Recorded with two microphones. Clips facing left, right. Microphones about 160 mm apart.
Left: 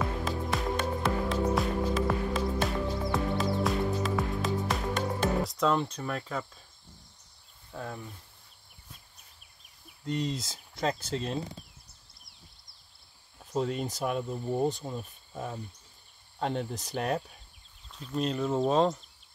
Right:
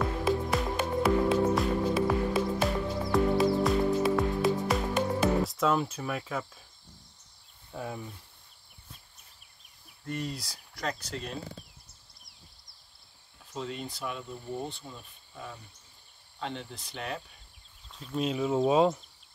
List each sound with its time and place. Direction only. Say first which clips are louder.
0.0 s music: right 4 dB; centre (ahead or behind)
7.7 s speech: right 1 dB; 10° right (ahead or behind)
10.0 s speech: left 4 dB; 20° left (ahead or behind)
13.5 s speech: left 6 dB; 45° left (ahead or behind)
17.9 s speech: even; centre (ahead or behind)